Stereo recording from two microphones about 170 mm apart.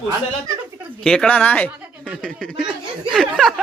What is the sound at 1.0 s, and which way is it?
A man's voice, 5° left (ahead or behind).